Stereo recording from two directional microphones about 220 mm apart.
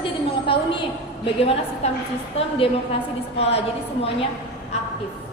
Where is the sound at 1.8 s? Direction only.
30° left (ahead or behind).